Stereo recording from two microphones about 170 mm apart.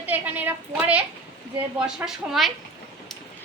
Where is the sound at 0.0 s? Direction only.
10° right (ahead or behind).